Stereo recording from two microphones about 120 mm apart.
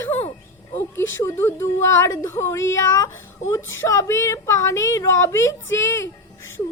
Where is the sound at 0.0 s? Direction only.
20° left (ahead or behind).